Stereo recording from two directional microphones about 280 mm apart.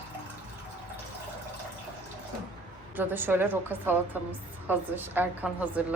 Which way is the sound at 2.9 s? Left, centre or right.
Centre.